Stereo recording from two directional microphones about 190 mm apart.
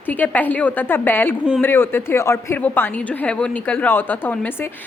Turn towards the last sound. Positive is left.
turn(degrees=10)  # may be behind; listen again after turning